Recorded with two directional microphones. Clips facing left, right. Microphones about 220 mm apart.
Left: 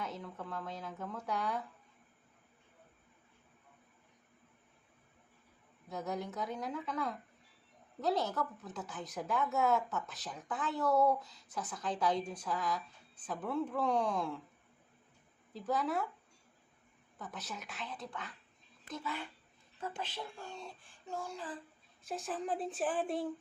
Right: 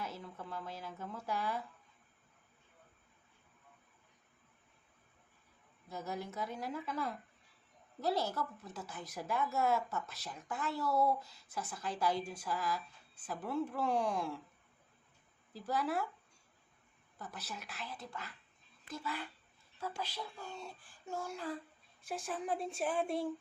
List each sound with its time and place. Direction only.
0.0 s speech: 5° right (ahead or behind)
5.9 s speech: 5° right (ahead or behind)
15.5 s speech: 5° right (ahead or behind)
17.4 s speech: centre (ahead or behind)